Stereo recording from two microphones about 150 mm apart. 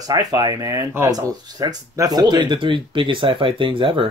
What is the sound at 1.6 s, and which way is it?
Speech, 25° right (ahead or behind).